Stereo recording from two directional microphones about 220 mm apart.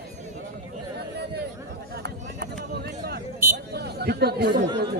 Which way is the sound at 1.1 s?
50° right (ahead or behind).